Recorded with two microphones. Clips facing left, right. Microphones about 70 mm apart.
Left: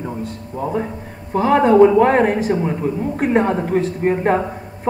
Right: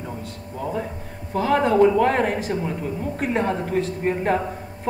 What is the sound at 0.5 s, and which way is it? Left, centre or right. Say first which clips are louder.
A man's voice: left 5 dB; left.